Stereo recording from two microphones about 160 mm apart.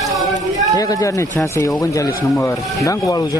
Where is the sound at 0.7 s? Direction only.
20° left (ahead or behind).